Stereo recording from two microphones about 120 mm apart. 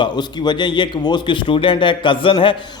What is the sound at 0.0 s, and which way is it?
Speech, 40° left (ahead or behind).